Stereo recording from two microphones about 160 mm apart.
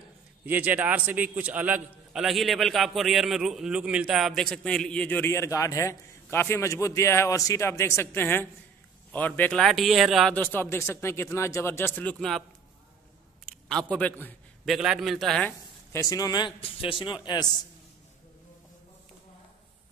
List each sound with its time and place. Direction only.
0.5 s a man's voice: 10° right (ahead or behind)
10.3 s speech: 10° left (ahead or behind)
13.5 s a man's voice: 5° left (ahead or behind)
14.7 s a man's voice: 5° right (ahead or behind)
15.9 s a man's voice: 20° left (ahead or behind)